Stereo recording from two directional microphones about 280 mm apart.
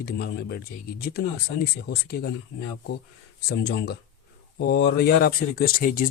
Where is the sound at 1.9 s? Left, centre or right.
Left.